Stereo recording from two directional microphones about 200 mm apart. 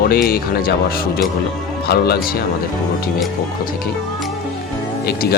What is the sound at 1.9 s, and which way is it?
Speech, 50° left (ahead or behind).